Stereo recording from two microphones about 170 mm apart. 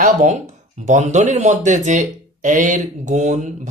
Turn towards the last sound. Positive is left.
turn(degrees=-45)  # may be behind; listen again after turning